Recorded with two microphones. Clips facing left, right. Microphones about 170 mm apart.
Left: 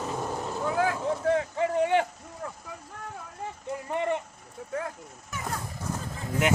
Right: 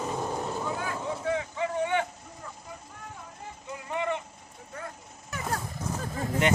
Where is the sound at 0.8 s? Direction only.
90° left.